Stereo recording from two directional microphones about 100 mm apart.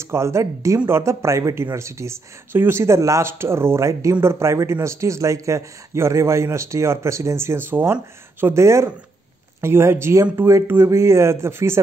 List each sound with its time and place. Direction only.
0.0 s speech: 25° right (ahead or behind)